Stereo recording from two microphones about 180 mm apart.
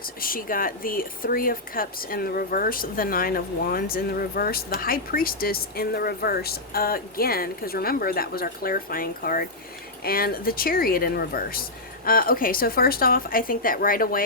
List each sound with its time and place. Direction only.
0.0 s speech: 55° left (ahead or behind)